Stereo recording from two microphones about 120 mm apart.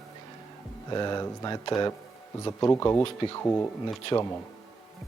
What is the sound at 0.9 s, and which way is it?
Speech, 35° left (ahead or behind).